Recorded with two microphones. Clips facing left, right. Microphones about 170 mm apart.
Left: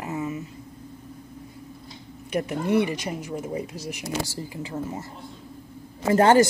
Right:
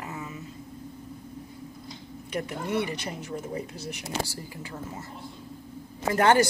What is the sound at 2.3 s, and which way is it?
A woman's voice, 15° left (ahead or behind).